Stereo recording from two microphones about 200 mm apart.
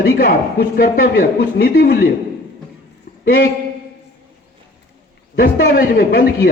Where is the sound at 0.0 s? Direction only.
50° left (ahead or behind).